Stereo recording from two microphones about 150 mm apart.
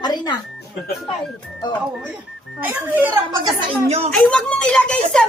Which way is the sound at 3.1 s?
25° right (ahead or behind).